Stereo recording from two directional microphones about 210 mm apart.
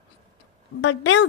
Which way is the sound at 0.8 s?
60° left (ahead or behind).